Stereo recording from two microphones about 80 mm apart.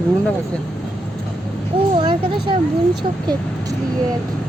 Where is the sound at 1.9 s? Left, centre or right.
Right.